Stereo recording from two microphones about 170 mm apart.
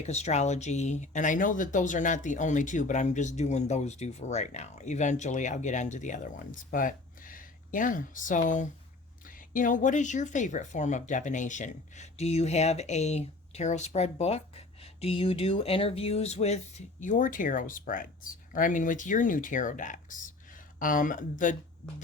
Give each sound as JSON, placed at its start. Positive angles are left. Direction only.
{"t": 0.0, "sound": "speech", "side_deg": 40}